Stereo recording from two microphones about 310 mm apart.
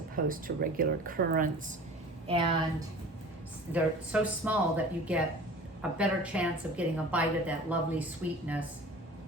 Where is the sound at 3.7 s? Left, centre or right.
Centre.